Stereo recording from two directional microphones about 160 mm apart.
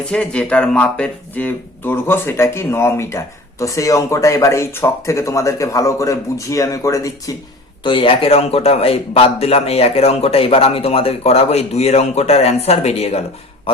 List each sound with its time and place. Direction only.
0.0 s speech: 5° left (ahead or behind)
7.9 s a man's voice: 35° left (ahead or behind)